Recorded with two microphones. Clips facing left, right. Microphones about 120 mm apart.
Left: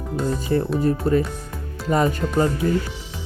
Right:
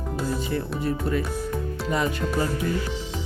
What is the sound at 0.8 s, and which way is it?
Speech, 40° left (ahead or behind).